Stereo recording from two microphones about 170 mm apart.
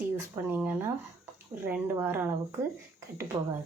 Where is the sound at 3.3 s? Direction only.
25° right (ahead or behind).